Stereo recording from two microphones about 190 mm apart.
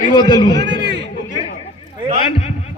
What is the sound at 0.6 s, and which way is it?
Speech, 65° right (ahead or behind).